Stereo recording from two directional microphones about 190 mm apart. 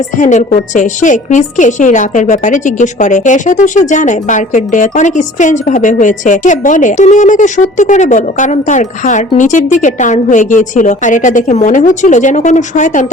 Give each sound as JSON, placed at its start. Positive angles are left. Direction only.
{"t": 0.2, "sound": "a woman's voice", "side_deg": 40}